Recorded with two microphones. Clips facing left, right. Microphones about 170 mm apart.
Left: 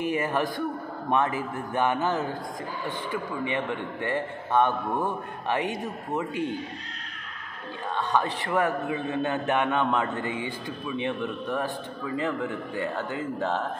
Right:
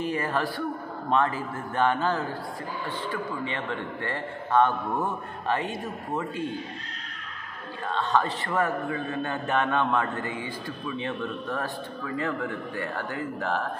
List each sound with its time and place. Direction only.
0.0 s a man's voice: 15° left (ahead or behind)
7.9 s a man's voice: 15° left (ahead or behind)